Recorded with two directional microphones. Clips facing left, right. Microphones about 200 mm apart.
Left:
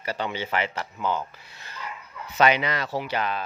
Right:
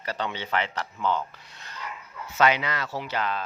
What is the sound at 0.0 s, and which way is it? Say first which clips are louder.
Speech: left 2 dB; 10° left (ahead or behind).